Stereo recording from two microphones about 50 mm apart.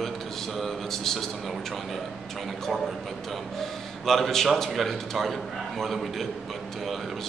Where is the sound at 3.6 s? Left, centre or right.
Centre.